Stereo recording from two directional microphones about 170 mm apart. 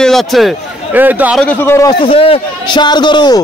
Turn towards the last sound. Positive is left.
turn(degrees=25)  # may be behind; listen again after turning